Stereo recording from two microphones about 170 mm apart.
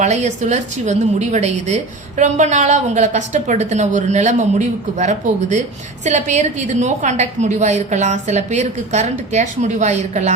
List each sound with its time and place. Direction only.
0.0 s a woman's voice: 40° right (ahead or behind)